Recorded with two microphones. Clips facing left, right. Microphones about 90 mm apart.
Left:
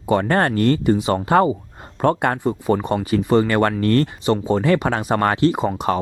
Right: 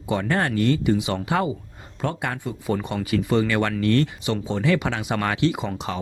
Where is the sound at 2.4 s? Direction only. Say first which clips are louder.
Left 7 dB; 40° left (ahead or behind).